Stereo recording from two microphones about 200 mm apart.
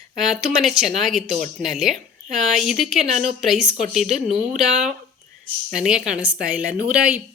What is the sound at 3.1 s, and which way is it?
Speech, 35° right (ahead or behind).